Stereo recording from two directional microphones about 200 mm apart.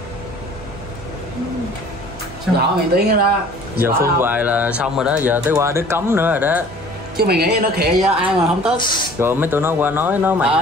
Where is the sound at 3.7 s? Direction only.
10° right (ahead or behind).